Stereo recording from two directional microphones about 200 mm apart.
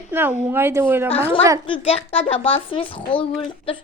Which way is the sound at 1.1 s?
30° left (ahead or behind).